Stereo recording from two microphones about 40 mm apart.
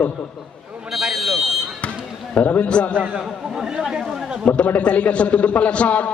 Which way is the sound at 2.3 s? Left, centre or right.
Left.